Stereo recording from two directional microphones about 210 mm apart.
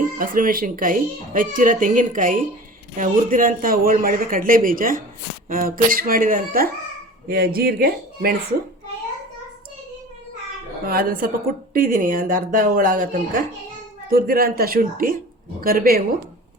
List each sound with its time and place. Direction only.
0.0 s speech: 40° right (ahead or behind)
10.8 s speech: 45° right (ahead or behind)